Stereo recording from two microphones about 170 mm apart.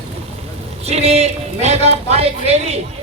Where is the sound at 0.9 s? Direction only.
40° right (ahead or behind).